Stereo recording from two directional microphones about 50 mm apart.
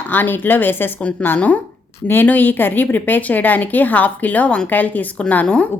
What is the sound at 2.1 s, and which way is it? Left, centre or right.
Speech, left.